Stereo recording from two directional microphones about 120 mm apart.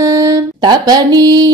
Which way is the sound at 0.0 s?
30° right (ahead or behind).